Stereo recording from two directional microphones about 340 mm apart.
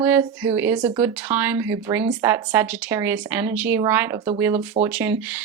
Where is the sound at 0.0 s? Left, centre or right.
Centre.